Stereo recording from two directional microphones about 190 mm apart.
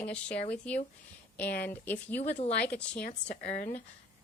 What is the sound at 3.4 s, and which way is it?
Speech, 40° left (ahead or behind).